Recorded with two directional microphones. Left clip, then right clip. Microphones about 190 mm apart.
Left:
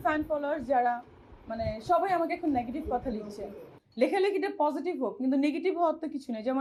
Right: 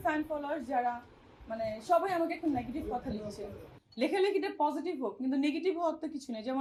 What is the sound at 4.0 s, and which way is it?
A woman's voice, 20° left (ahead or behind).